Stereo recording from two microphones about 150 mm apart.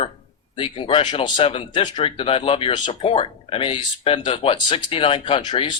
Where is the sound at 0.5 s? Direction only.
35° left (ahead or behind).